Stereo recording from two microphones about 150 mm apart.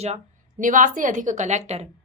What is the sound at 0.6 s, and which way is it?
A woman's voice, 60° right (ahead or behind).